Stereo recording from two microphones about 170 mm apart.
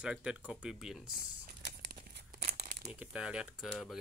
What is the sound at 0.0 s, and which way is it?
Speech, 5° right (ahead or behind).